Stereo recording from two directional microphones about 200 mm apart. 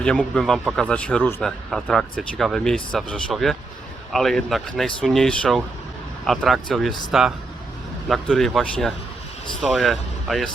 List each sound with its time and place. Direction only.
0.0 s speech: 5° left (ahead or behind)